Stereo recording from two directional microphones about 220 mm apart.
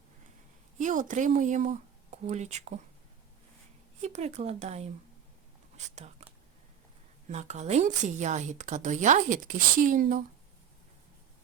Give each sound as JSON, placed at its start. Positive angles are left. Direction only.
{"t": 0.8, "sound": "speech", "side_deg": -35}
{"t": 4.0, "sound": "a woman's voice", "side_deg": -30}
{"t": 7.3, "sound": "a woman's voice", "side_deg": -30}